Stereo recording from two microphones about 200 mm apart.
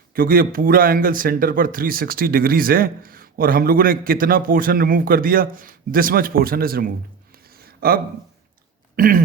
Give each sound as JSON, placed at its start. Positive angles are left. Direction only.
{"t": 0.1, "sound": "a man's voice", "side_deg": -45}
{"t": 7.6, "sound": "a sound", "side_deg": -50}
{"t": 9.0, "sound": "speech", "side_deg": -45}